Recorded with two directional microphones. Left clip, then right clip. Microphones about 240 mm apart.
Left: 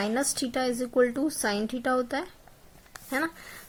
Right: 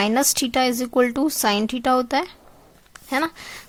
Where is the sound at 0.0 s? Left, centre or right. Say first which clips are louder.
Right 8 dB; right.